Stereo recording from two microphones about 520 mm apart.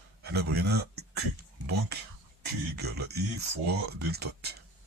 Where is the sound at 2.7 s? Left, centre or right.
Centre.